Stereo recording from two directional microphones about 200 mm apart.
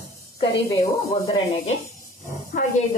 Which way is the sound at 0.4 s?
25° left (ahead or behind).